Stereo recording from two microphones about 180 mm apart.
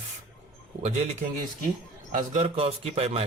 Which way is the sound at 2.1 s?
35° right (ahead or behind).